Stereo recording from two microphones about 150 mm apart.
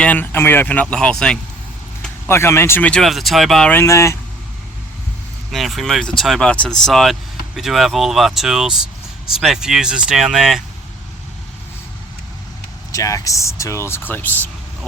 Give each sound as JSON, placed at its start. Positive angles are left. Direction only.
{"t": 0.0, "sound": "speech", "side_deg": 10}
{"t": 2.0, "sound": "speech", "side_deg": 15}
{"t": 3.7, "sound": "speech", "side_deg": 15}
{"t": 5.5, "sound": "speech", "side_deg": 0}
{"t": 12.9, "sound": "speech", "side_deg": 20}